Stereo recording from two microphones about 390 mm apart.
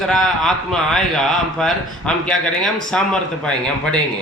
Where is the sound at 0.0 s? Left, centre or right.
Centre.